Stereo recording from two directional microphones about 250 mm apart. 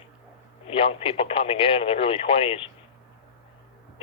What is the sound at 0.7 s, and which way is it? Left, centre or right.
Speech, left.